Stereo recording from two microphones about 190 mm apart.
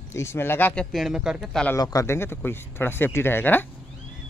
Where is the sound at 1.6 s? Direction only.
20° left (ahead or behind).